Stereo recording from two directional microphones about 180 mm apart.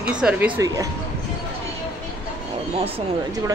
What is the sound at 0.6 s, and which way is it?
Speech, 20° right (ahead or behind).